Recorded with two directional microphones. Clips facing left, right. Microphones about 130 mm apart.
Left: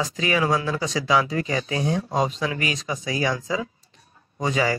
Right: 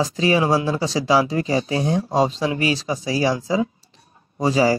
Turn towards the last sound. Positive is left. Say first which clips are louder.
# right 6 dB
turn(degrees=-35)  # may be behind; listen again after turning